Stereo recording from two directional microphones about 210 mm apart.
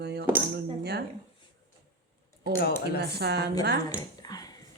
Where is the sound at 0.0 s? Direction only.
50° right (ahead or behind).